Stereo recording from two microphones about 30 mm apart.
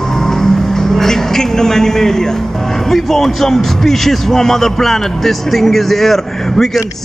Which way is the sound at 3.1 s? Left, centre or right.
Centre.